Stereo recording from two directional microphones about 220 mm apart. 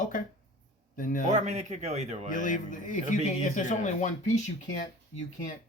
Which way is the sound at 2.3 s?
35° left (ahead or behind).